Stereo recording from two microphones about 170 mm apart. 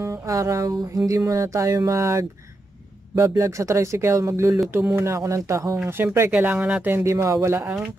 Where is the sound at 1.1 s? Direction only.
20° right (ahead or behind).